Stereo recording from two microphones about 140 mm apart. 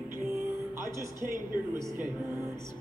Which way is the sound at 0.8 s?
20° right (ahead or behind).